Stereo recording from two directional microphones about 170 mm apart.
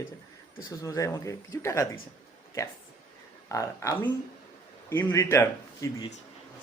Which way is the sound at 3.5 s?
15° left (ahead or behind).